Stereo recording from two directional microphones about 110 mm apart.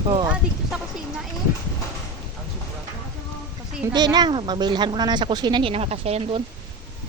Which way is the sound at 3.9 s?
40° right (ahead or behind).